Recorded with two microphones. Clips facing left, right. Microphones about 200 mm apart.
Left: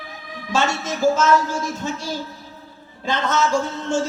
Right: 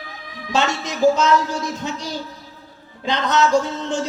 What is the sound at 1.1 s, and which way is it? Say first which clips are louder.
Speech: even; 15° right (ahead or behind).